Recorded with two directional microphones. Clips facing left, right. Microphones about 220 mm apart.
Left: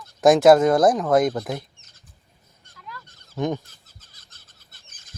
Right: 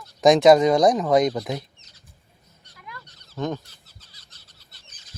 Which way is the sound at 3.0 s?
50° left (ahead or behind).